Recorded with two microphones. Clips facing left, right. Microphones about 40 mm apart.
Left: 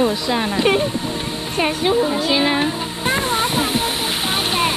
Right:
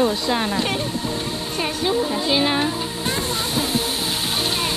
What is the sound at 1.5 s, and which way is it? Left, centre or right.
Speech, left.